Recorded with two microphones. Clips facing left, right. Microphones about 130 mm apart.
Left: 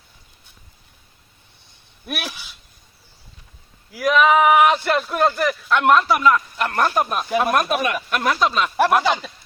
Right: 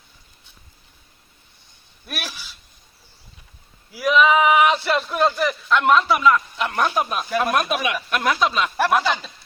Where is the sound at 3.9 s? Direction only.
Centre (ahead or behind).